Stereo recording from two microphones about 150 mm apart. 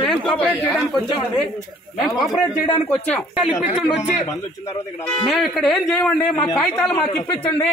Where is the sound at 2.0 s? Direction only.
Centre (ahead or behind).